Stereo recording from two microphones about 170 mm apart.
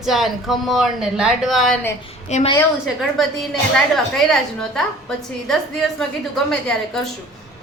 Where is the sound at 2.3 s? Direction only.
45° left (ahead or behind).